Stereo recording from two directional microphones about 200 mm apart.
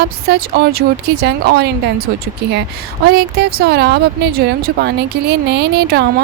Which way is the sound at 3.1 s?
50° right (ahead or behind).